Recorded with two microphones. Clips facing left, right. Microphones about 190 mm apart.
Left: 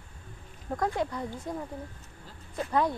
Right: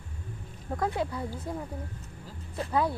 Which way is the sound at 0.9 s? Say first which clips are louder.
Even; 5° right (ahead or behind).